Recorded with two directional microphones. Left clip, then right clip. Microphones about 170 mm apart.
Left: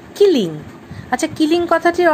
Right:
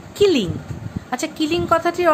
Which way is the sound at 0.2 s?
20° left (ahead or behind).